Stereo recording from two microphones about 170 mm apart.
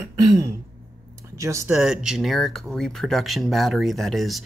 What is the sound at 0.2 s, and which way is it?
Throat clearing, 20° right (ahead or behind).